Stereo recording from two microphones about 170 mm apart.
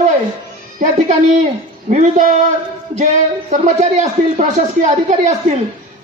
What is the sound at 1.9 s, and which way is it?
Speech, 45° right (ahead or behind).